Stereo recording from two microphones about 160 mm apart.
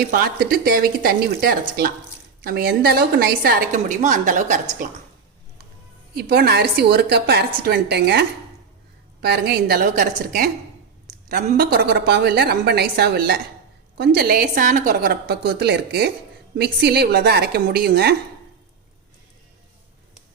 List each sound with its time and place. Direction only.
0.0 s a woman's voice: 65° right (ahead or behind)
6.1 s a woman's voice: 80° right
9.2 s a woman's voice: 90° right